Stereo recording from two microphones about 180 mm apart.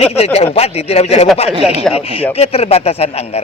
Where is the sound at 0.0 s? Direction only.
35° left (ahead or behind).